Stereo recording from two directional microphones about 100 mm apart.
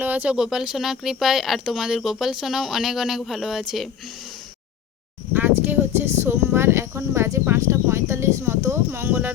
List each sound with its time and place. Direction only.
0.0 s speech: 15° right (ahead or behind)
5.3 s speech: 20° right (ahead or behind)